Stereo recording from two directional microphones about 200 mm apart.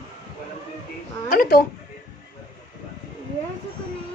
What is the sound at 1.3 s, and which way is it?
Speech, 45° left (ahead or behind).